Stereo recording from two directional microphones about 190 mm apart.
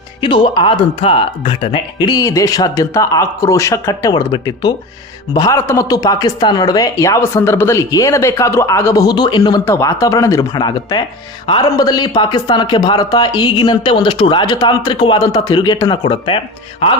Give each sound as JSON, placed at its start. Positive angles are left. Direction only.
{"t": 0.2, "sound": "speech", "side_deg": 25}